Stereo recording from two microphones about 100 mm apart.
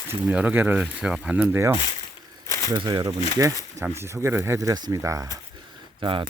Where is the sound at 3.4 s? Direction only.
30° right (ahead or behind).